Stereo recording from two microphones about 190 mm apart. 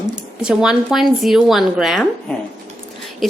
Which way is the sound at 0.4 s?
5° right (ahead or behind).